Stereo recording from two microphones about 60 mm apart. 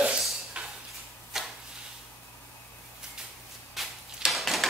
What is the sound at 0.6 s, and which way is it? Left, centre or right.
Cutlery, centre.